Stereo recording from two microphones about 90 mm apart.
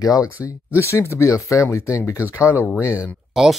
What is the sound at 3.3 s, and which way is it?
Speech, 5° right (ahead or behind).